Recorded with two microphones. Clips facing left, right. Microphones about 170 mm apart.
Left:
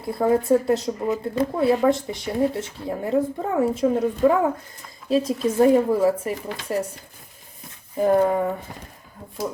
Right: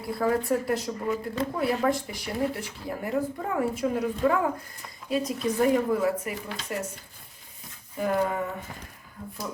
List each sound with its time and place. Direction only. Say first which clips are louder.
0.0 s speech: left 5 dB; 25° left (ahead or behind)
7.9 s speech: left 8 dB; 35° left (ahead or behind)